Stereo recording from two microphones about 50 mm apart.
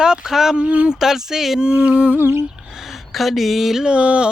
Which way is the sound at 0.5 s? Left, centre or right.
Right.